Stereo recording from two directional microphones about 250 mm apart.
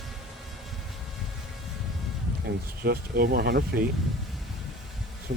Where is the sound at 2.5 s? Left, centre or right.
Right.